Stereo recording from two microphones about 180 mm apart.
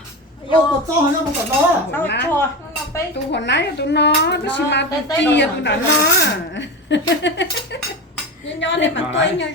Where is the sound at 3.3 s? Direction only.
75° left (ahead or behind).